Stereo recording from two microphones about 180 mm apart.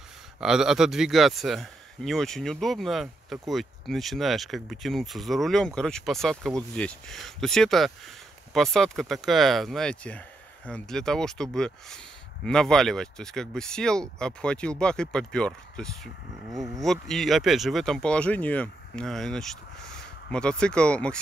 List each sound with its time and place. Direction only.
0.4 s speech: 5° right (ahead or behind)
16.4 s speech: 20° right (ahead or behind)
16.8 s speech: centre (ahead or behind)